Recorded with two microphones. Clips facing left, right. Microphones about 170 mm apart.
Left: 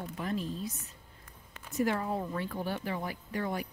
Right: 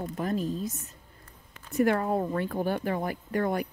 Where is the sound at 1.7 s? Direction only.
60° right (ahead or behind).